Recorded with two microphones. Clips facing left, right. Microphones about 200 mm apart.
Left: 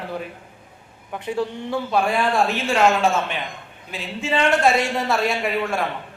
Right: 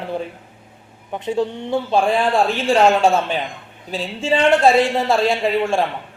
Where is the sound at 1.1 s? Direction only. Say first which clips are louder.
Right 4 dB; 20° right (ahead or behind).